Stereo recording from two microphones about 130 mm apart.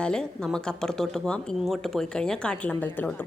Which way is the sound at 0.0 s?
5° left (ahead or behind).